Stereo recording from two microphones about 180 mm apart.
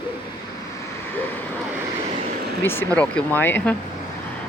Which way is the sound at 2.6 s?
10° left (ahead or behind).